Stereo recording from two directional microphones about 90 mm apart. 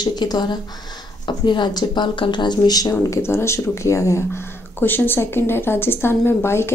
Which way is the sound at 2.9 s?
30° left (ahead or behind).